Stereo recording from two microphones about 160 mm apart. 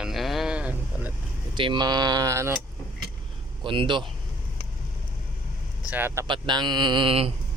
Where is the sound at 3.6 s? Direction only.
30° right (ahead or behind).